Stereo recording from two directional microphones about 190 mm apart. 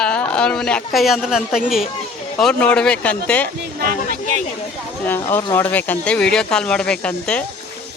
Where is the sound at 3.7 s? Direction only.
50° right (ahead or behind).